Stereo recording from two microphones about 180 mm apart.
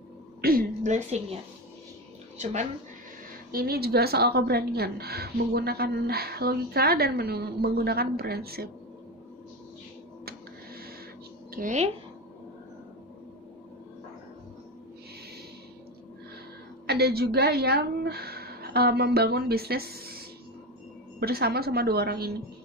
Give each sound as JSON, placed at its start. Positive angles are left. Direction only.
{"t": 0.4, "sound": "a sound", "side_deg": -55}
{"t": 2.3, "sound": "speech", "side_deg": -40}
{"t": 3.5, "sound": "a woman's voice", "side_deg": -60}
{"t": 11.5, "sound": "speech", "side_deg": -45}
{"t": 16.8, "sound": "a woman's voice", "side_deg": -60}